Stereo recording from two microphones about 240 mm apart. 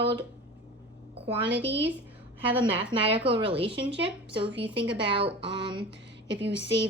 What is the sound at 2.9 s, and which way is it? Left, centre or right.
A woman's voice, right.